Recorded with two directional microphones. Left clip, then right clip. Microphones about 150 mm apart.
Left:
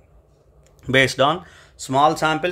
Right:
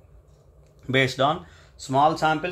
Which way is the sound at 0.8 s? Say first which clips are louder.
Left 5 dB; 45° left (ahead or behind).